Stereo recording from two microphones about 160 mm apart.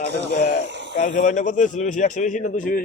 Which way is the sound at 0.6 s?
90° right.